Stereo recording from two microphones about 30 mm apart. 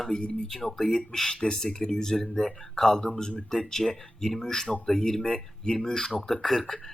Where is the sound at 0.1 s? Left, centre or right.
Left.